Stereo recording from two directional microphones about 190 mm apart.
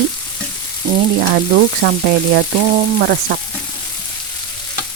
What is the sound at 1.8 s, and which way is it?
Speech, 55° right (ahead or behind).